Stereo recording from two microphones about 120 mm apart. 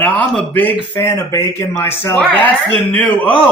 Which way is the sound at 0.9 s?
25° left (ahead or behind).